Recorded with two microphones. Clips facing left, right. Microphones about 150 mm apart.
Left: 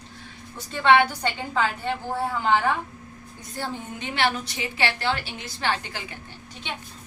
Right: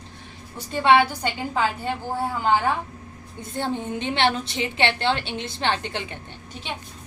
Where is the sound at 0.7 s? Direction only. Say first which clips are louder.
Right 1 dB; 10° right (ahead or behind).